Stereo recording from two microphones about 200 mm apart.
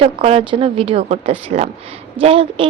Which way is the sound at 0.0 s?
30° right (ahead or behind).